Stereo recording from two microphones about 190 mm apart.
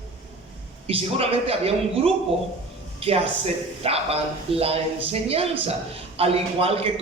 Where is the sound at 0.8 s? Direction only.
30° right (ahead or behind).